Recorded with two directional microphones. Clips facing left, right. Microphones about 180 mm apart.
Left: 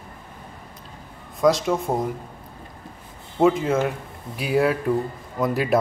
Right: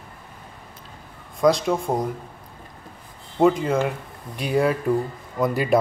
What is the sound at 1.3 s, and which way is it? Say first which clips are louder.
Speech: even; centre (ahead or behind).